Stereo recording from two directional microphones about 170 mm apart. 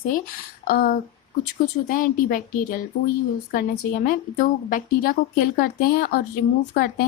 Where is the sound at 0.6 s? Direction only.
60° left (ahead or behind).